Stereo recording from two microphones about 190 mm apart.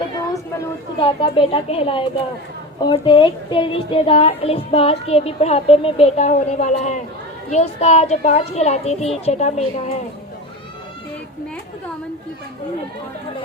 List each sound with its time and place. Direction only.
1.0 s a woman's voice: 30° left (ahead or behind)